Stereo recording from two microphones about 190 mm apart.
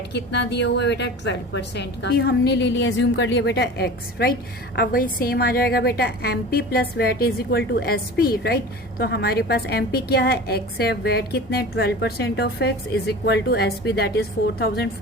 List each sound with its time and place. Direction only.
0.1 s a woman's voice: 65° left (ahead or behind)